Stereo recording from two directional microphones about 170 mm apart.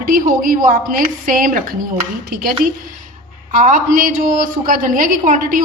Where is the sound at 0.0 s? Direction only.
55° right (ahead or behind).